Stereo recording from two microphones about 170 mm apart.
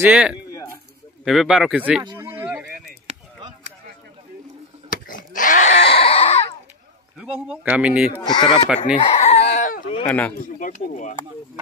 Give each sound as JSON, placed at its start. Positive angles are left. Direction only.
{"t": 0.0, "sound": "speech", "side_deg": -5}
{"t": 2.1, "sound": "a sound", "side_deg": -15}
{"t": 3.1, "sound": "chop", "side_deg": -45}
{"t": 4.8, "sound": "a sound", "side_deg": 50}
{"t": 7.2, "sound": "speech", "side_deg": -5}
{"t": 8.2, "sound": "speech", "side_deg": 25}
{"t": 8.9, "sound": "chicken", "side_deg": 35}
{"t": 10.0, "sound": "speech", "side_deg": 10}
{"t": 10.4, "sound": "speech", "side_deg": 50}